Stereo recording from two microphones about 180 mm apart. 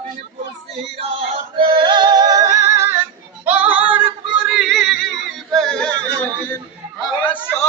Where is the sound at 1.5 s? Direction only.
25° right (ahead or behind).